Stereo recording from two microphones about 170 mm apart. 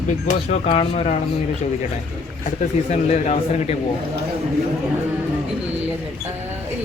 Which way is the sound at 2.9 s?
40° left (ahead or behind).